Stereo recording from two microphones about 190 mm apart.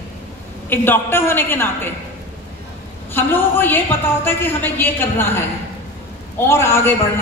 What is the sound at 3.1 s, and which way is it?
A woman's voice, 10° left (ahead or behind).